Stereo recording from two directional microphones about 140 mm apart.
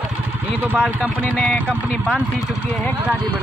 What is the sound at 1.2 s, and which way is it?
Speech, 10° left (ahead or behind).